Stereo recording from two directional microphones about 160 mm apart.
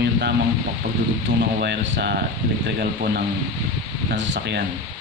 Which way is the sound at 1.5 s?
85° right.